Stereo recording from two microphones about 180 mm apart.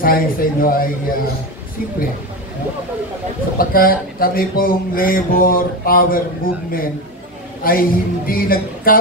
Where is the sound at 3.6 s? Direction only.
55° left (ahead or behind).